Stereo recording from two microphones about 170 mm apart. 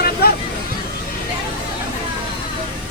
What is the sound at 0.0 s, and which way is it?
Hubbub, 65° left (ahead or behind).